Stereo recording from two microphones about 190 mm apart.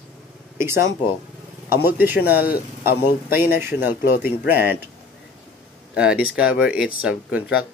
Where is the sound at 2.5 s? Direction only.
50° left (ahead or behind).